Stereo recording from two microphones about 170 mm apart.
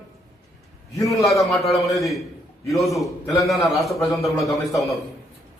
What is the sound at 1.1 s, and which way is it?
A man's voice, centre (ahead or behind).